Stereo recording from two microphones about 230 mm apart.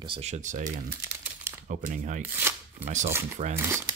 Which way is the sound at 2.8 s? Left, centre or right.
Right.